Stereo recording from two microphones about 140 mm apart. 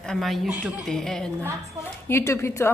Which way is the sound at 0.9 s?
5° left (ahead or behind).